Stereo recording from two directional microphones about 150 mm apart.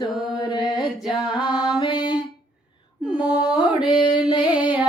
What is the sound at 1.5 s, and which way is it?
Music, 5° right (ahead or behind).